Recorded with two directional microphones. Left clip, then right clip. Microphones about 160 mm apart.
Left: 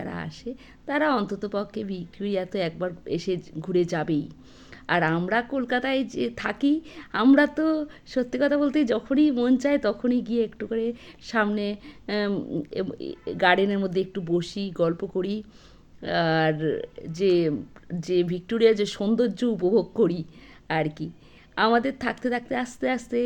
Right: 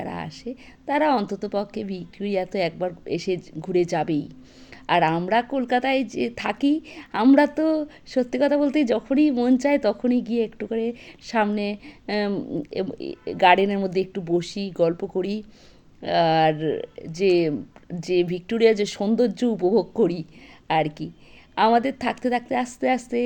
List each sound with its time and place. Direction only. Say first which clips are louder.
0.0 s a woman's voice: right 3 dB; 15° right (ahead or behind)